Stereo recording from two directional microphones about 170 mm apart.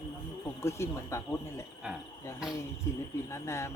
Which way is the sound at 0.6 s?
15° left (ahead or behind).